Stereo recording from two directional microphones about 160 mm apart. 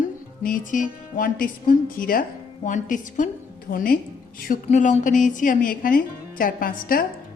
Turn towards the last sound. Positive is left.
turn(degrees=65)  # may be behind; listen again after turning